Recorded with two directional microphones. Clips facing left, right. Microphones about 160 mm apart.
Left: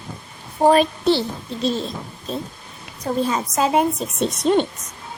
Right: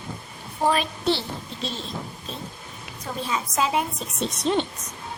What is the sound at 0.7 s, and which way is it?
Speech, 45° left (ahead or behind).